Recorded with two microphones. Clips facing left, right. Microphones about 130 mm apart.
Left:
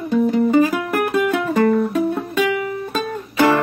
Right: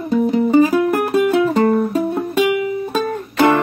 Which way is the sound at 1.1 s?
25° right (ahead or behind).